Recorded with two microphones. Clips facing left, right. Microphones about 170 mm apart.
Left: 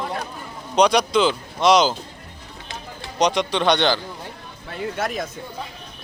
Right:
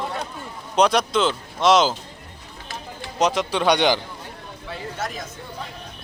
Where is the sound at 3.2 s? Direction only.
5° right (ahead or behind).